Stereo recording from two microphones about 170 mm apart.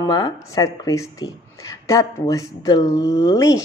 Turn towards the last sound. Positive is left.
turn(degrees=20)  # may be behind; listen again after turning